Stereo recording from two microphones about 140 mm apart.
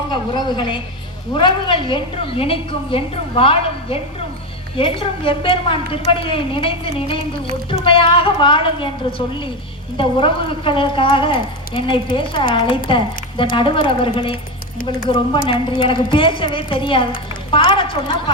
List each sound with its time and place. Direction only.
0.1 s a woman's voice: 30° left (ahead or behind)